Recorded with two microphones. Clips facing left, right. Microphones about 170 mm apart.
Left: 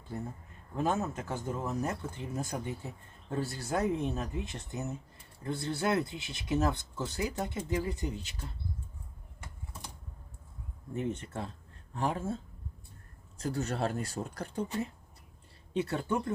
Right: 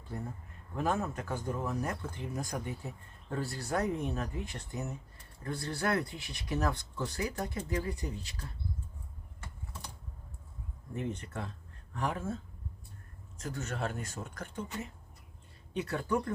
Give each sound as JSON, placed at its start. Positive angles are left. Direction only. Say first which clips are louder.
{"t": 0.8, "sound": "speech", "louder": "left 1 dB", "side_deg": 25}
{"t": 10.9, "sound": "speech", "louder": "left 2 dB", "side_deg": 25}
{"t": 13.4, "sound": "speech", "louder": "left 5 dB", "side_deg": 35}